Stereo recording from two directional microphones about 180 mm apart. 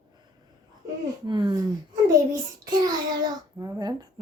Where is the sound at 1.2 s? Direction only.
25° right (ahead or behind).